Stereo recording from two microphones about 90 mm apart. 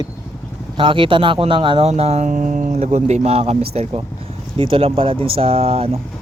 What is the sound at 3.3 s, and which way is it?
Speech, 90° right.